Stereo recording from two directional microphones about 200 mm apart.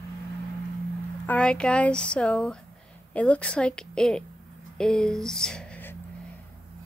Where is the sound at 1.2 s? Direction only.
5° left (ahead or behind).